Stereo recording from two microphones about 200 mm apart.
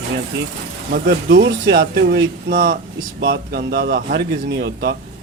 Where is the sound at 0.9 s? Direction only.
50° right (ahead or behind).